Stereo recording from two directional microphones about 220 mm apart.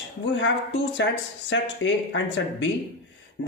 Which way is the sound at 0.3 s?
55° left (ahead or behind).